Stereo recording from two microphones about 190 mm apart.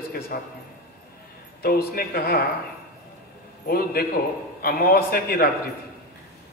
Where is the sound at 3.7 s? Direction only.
50° left (ahead or behind).